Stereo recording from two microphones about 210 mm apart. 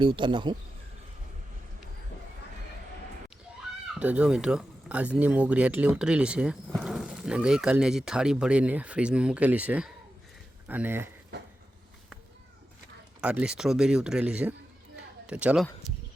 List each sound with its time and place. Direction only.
0.0 s speech: 25° right (ahead or behind)
4.0 s speech: 5° right (ahead or behind)
13.2 s speech: 5° right (ahead or behind)